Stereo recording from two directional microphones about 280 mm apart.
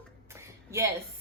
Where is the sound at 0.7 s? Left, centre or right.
Centre.